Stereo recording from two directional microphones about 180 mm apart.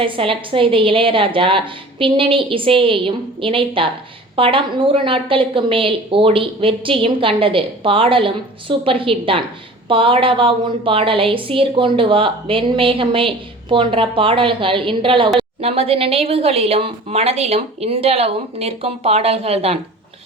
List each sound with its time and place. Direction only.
0.0 s a woman's voice: 30° right (ahead or behind)